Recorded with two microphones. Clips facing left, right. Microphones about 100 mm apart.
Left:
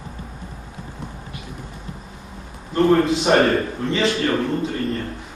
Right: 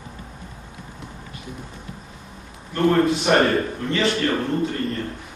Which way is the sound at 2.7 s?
20° left (ahead or behind).